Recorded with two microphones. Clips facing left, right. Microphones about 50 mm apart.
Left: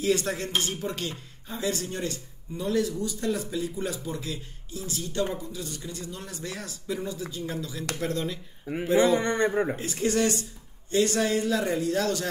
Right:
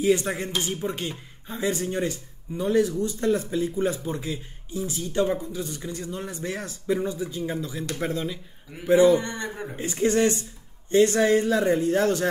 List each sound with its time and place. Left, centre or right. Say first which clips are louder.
0.0 s speech: right 3 dB; centre
8.1 s speech: right 1 dB; centre
8.9 s a man's voice: right 4 dB; left
9.8 s speech: right 4 dB; centre
10.0 s speech: right 4 dB; right